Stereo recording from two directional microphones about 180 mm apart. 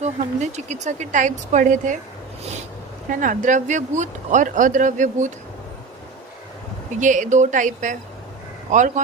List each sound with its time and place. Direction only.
0.0 s speech: 40° right (ahead or behind)
3.1 s speech: 45° right (ahead or behind)
7.0 s speech: 45° right (ahead or behind)